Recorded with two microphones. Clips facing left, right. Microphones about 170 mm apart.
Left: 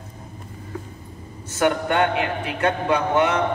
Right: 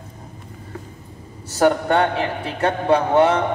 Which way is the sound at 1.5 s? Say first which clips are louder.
Right 4 dB; 35° right (ahead or behind).